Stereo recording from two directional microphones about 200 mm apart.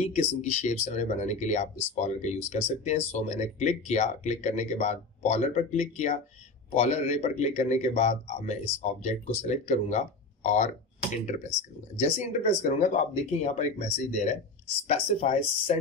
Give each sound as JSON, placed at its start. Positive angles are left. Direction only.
{"t": 0.0, "sound": "speech", "side_deg": 35}
{"t": 12.0, "sound": "speech", "side_deg": 35}